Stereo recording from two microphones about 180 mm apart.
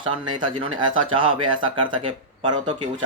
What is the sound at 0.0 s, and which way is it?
Speech, 25° right (ahead or behind).